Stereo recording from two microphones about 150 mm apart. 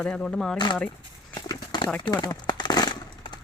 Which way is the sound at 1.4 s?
30° left (ahead or behind).